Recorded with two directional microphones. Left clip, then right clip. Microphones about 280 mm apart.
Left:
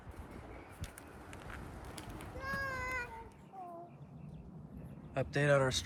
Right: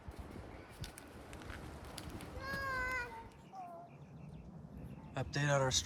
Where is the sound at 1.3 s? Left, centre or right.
Centre.